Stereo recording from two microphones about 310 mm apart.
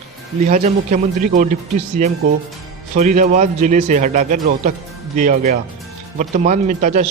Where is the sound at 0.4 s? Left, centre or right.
Right.